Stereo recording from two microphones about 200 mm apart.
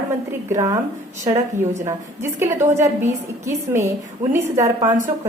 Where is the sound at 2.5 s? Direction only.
40° right (ahead or behind).